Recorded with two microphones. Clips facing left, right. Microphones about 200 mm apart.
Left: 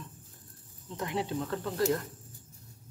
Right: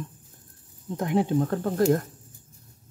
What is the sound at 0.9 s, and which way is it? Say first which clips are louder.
Speech: right 9 dB; 50° right (ahead or behind).